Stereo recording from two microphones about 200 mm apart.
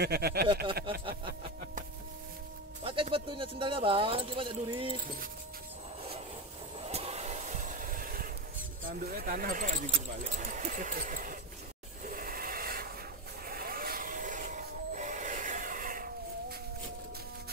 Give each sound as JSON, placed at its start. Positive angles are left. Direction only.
{"t": 0.0, "sound": "speech", "side_deg": -50}
{"t": 2.8, "sound": "speech", "side_deg": -25}
{"t": 6.8, "sound": "a sound", "side_deg": -30}
{"t": 8.8, "sound": "speech", "side_deg": -45}
{"t": 12.1, "sound": "rub", "side_deg": -45}
{"t": 13.5, "sound": "a sound", "side_deg": -45}